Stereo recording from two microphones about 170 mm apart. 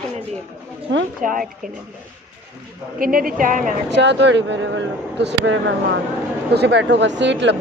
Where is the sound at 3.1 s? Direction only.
55° right (ahead or behind).